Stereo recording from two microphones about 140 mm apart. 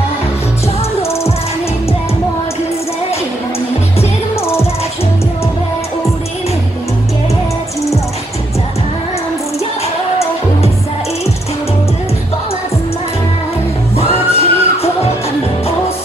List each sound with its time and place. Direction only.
13.9 s music: 45° left (ahead or behind)